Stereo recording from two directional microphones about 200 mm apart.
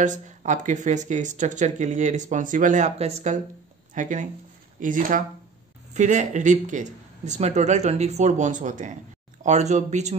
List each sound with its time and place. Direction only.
0.0 s speech: 40° right (ahead or behind)